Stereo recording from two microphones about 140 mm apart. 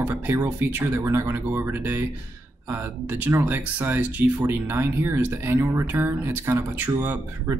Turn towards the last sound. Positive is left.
turn(degrees=-15)  # may be behind; listen again after turning